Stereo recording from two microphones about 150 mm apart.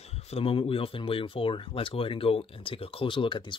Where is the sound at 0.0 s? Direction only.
45° left (ahead or behind).